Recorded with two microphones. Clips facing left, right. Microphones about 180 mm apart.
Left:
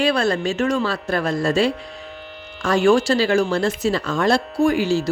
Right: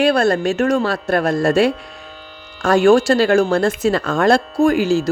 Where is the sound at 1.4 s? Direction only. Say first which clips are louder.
Right 4 dB; 65° right (ahead or behind).